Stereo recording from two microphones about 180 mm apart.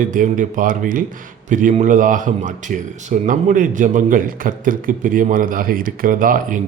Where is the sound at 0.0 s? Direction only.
50° right (ahead or behind).